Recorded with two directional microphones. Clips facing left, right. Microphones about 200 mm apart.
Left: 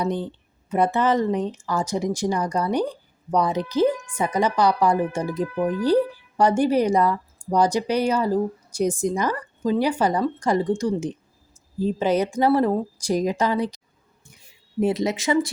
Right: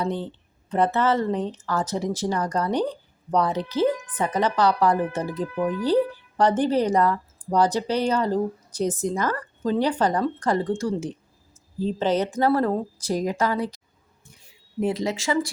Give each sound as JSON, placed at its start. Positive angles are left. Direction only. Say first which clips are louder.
{"t": 0.0, "sound": "speech", "louder": "left 2 dB", "side_deg": 15}
{"t": 14.8, "sound": "speech", "louder": "left 3 dB", "side_deg": 20}